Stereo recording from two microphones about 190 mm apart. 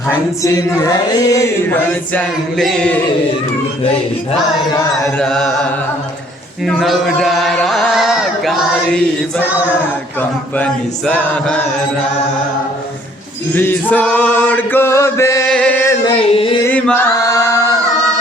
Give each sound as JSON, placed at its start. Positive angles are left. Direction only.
{"t": 0.4, "sound": "chant", "side_deg": 20}
{"t": 3.8, "sound": "music", "side_deg": 30}
{"t": 5.0, "sound": "music", "side_deg": 5}
{"t": 6.7, "sound": "speech", "side_deg": 0}
{"t": 10.2, "sound": "chant", "side_deg": 5}
{"t": 13.5, "sound": "chant", "side_deg": 10}
{"t": 15.4, "sound": "male singing", "side_deg": 5}
{"t": 16.1, "sound": "music", "side_deg": 30}
{"t": 16.6, "sound": "chant", "side_deg": 10}